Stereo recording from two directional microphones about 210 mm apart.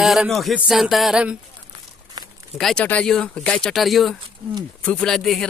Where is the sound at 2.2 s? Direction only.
20° right (ahead or behind).